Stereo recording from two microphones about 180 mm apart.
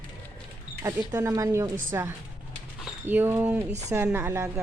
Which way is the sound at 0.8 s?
15° right (ahead or behind).